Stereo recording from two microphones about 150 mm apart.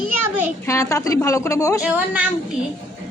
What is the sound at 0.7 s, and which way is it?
A woman's voice, 20° left (ahead or behind).